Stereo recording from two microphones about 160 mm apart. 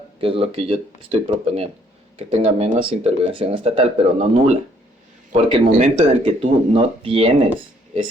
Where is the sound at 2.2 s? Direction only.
40° right (ahead or behind).